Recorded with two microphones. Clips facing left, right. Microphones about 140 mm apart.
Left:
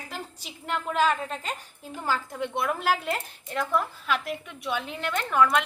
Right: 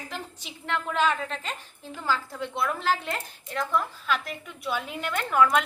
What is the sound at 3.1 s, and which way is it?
A woman's voice, 5° left (ahead or behind).